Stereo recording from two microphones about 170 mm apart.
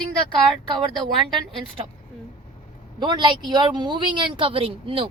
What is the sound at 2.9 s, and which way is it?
A woman's voice, 25° right (ahead or behind).